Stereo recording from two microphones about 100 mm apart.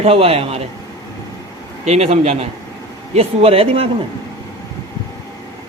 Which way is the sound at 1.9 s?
90° right.